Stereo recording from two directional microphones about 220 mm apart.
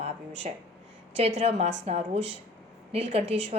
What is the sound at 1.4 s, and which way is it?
Speech, 30° right (ahead or behind).